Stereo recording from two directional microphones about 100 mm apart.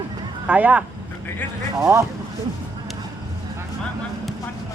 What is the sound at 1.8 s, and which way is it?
Speech, 30° right (ahead or behind).